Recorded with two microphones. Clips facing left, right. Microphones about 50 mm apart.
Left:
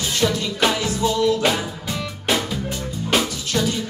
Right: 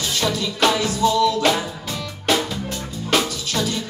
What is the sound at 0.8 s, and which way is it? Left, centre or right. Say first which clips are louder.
Music: right 2 dB; left.